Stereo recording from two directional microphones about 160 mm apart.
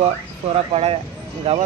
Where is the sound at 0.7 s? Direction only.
40° right (ahead or behind).